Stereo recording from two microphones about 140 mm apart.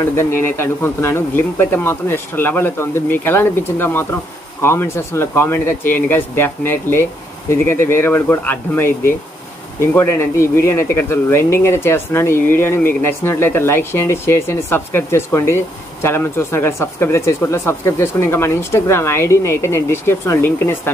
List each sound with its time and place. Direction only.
0.1 s speech: 15° left (ahead or behind)